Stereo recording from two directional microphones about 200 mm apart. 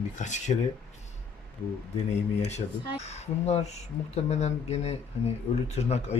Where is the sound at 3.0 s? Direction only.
35° left (ahead or behind).